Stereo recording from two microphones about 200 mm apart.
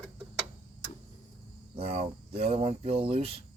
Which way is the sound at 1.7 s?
30° right (ahead or behind).